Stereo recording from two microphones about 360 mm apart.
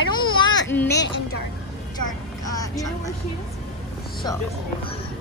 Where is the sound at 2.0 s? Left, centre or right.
Centre.